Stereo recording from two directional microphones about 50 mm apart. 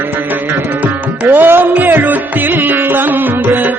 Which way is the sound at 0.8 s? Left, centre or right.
Right.